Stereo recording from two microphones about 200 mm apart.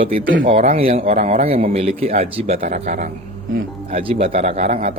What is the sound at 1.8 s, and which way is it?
Speech, 30° right (ahead or behind).